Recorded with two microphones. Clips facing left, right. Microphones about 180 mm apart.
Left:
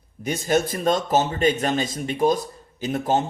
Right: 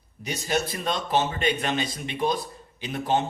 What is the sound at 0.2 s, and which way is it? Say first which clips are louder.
A man's voice: left 6 dB; 50° left (ahead or behind).